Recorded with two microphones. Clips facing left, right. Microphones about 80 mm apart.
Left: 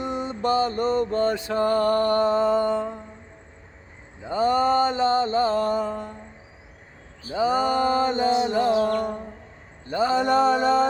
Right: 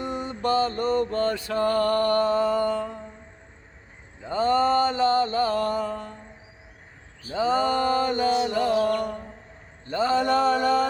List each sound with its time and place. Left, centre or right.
0.0 s mantra: left
4.2 s mantra: centre
7.3 s mantra: centre
9.8 s a sound: centre